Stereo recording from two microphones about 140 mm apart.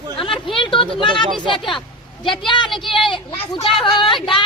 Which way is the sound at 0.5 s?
35° left (ahead or behind).